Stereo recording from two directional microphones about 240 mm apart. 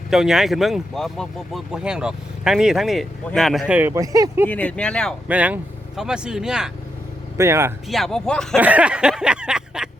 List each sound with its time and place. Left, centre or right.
0.1 s speech: centre
4.4 s speech: centre
7.9 s speech: centre